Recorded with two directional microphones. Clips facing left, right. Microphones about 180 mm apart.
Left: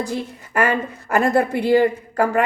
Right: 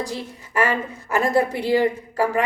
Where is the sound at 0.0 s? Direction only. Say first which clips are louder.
Left 4 dB; 55° left (ahead or behind).